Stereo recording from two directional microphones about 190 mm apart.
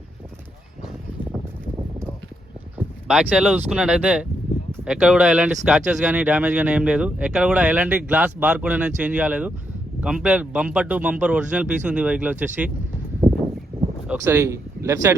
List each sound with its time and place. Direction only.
2.7 s speech: 5° right (ahead or behind)
14.1 s speech: 15° right (ahead or behind)